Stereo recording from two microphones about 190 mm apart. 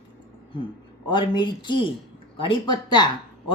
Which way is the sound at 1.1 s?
25° left (ahead or behind).